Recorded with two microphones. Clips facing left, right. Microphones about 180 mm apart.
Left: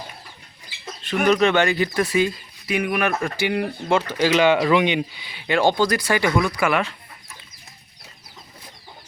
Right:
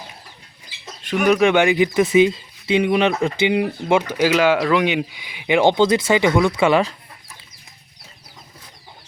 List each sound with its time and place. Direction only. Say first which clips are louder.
1.0 s speech: right 2 dB; 10° right (ahead or behind); by 6.9 s 30° right (ahead or behind)